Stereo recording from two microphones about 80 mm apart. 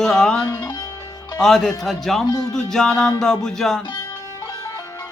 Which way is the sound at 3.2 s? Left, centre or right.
Centre.